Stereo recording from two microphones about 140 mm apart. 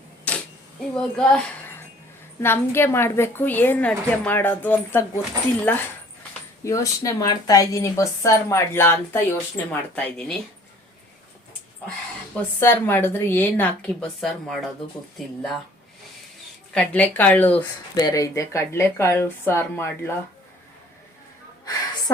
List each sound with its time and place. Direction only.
0.3 s camera: 10° left (ahead or behind)
0.9 s a child's voice: 5° left (ahead or behind)
2.4 s a woman's voice: 15° left (ahead or behind)
6.7 s a woman's voice: 25° left (ahead or behind); by 10.3 s 5° left (ahead or behind)
12.4 s a woman's voice: 15° left (ahead or behind)
16.7 s a woman's voice: 10° left (ahead or behind)
17.9 s speech: 25° left (ahead or behind)
21.6 s a sound: 30° left (ahead or behind)